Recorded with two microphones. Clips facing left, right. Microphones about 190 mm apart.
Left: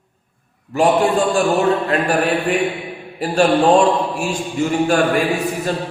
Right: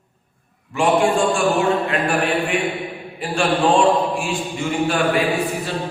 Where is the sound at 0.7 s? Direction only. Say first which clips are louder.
Left 2 dB; 40° left (ahead or behind).